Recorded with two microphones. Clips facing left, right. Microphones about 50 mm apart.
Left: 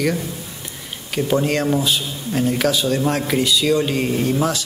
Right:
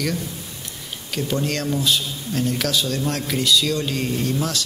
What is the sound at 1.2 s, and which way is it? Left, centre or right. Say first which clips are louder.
Speech: left 6 dB; centre.